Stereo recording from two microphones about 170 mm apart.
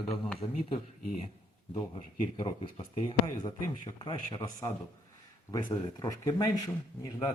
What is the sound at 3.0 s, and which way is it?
A man's voice, 25° left (ahead or behind).